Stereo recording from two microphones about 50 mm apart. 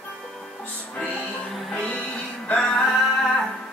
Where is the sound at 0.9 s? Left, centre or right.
Left.